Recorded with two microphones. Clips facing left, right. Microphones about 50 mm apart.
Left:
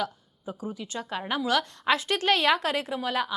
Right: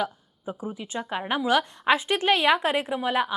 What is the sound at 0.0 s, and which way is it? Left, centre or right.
A woman's voice, right.